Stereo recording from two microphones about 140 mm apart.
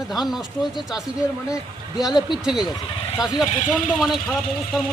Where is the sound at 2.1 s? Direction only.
30° left (ahead or behind).